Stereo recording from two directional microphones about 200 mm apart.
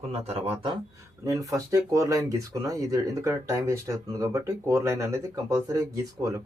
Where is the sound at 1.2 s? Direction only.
15° right (ahead or behind).